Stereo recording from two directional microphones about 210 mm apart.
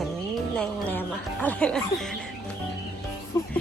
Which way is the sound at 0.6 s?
10° left (ahead or behind).